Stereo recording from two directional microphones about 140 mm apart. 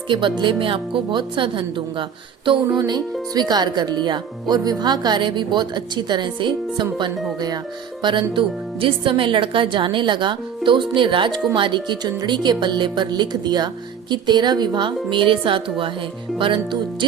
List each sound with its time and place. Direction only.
0.1 s speech: 35° right (ahead or behind)